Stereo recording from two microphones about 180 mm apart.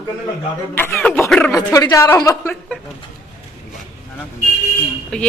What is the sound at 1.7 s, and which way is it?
Speech, 15° left (ahead or behind).